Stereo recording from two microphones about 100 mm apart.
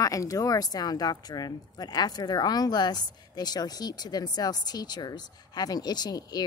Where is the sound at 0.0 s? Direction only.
35° left (ahead or behind).